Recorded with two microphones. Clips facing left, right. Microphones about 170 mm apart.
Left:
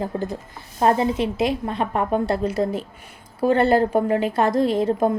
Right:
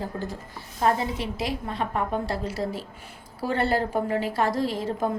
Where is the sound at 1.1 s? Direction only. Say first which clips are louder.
Left 8 dB; 20° left (ahead or behind).